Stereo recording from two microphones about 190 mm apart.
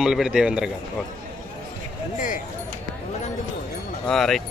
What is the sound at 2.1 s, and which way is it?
Speech, 45° left (ahead or behind).